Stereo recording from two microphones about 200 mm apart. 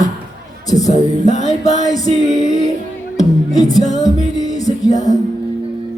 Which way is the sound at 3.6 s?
20° left (ahead or behind).